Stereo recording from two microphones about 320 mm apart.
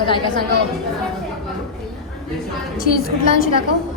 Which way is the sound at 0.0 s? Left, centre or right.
Centre.